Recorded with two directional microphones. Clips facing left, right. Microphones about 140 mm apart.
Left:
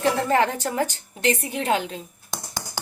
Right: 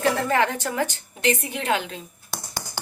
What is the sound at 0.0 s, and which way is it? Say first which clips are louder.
A woman's voice: left 1 dB; 30° left (ahead or behind).